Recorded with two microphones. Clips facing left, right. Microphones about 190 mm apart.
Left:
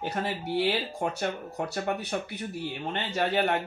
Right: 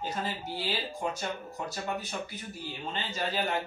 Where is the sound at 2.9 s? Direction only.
65° left (ahead or behind).